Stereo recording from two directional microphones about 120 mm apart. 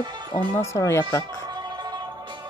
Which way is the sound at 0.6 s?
20° left (ahead or behind).